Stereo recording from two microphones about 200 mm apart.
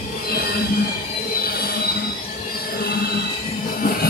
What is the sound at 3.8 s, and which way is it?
Music, 50° left (ahead or behind).